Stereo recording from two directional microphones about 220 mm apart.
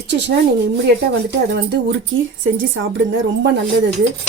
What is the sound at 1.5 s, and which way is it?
A woman's voice, 50° right (ahead or behind).